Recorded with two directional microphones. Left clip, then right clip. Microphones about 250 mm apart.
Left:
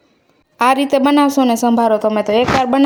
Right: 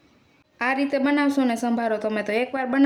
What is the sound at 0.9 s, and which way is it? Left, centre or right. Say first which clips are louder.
A woman's voice: left 9 dB; left.